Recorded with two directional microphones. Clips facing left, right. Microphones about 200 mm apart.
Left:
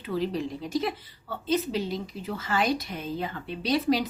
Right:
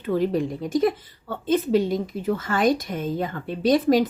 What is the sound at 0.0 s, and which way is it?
A woman's voice, 50° right (ahead or behind).